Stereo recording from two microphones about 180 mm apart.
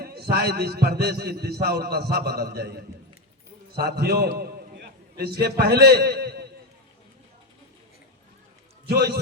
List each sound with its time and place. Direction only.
0.0 s a man's voice: 60° right (ahead or behind)
3.8 s a man's voice: 60° right (ahead or behind)